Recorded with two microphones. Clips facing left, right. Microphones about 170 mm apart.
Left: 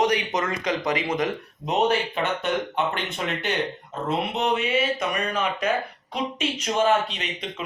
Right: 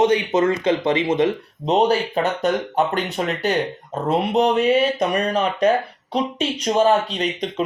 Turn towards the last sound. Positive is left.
turn(degrees=-35)  # may be behind; listen again after turning